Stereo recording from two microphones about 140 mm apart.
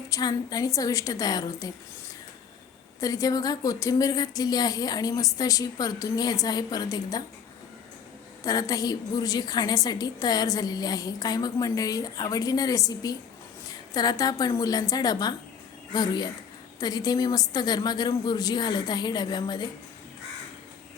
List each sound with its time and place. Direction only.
0.1 s a woman's voice: 25° left (ahead or behind)
3.0 s a woman's voice: 25° left (ahead or behind)
8.4 s a woman's voice: 25° left (ahead or behind)